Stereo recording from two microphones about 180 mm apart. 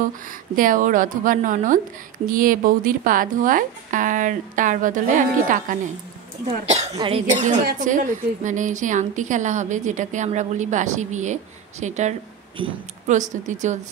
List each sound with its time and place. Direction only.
0.6 s a woman's voice: 45° right (ahead or behind)
6.4 s a woman's voice: 35° right (ahead or behind)